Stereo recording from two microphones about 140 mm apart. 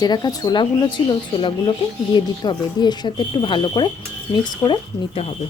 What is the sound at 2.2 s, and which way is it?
Speech, 30° left (ahead or behind).